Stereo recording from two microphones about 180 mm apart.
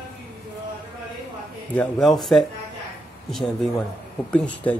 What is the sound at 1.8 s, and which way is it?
Speech, centre (ahead or behind).